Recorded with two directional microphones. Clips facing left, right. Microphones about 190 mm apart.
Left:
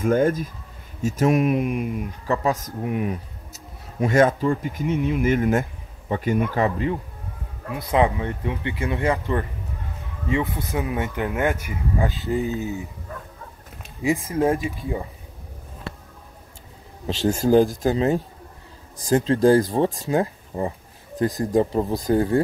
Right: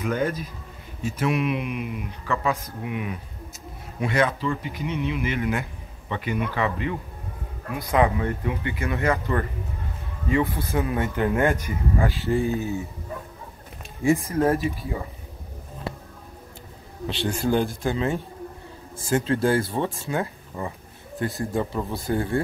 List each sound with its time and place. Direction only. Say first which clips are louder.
0.0 s speech: left 6 dB; 50° left (ahead or behind)
7.9 s speech: left 1 dB; 25° left (ahead or behind)
9.1 s speech: left 1 dB; 15° left (ahead or behind)
12.0 s speech: even; 20° left (ahead or behind)
14.0 s speech: even; 15° left (ahead or behind)
17.1 s speech: left 6 dB; 40° left (ahead or behind)